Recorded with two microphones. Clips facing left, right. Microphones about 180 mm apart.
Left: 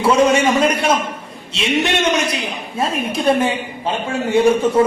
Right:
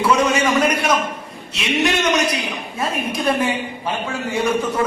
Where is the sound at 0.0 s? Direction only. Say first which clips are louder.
Left 4 dB; 30° left (ahead or behind).